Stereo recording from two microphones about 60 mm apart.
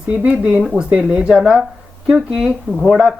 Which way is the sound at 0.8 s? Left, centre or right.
Centre.